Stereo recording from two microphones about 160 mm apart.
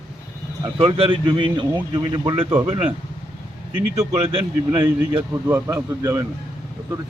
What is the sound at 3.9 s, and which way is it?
A man's voice, 40° right (ahead or behind).